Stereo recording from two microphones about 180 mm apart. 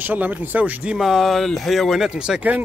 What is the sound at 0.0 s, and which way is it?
Speech, 10° right (ahead or behind).